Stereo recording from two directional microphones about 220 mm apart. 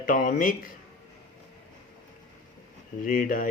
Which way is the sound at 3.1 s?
40° left (ahead or behind).